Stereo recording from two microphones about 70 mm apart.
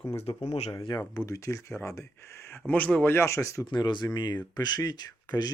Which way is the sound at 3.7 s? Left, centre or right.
Left.